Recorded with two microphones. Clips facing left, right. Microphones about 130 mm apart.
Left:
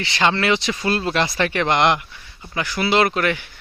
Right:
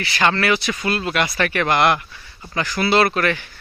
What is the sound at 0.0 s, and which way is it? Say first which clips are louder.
Speech: even; 20° left (ahead or behind).